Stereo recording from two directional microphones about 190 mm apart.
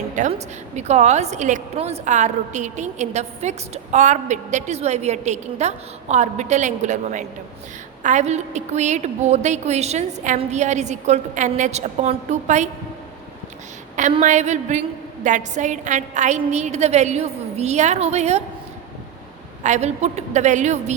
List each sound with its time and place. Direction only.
0.2 s a woman's voice: 35° right (ahead or behind)
14.2 s a woman's voice: 40° right (ahead or behind)
19.6 s a woman's voice: 35° right (ahead or behind)